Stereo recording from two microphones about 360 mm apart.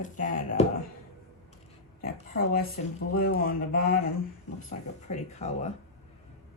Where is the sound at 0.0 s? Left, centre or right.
Left.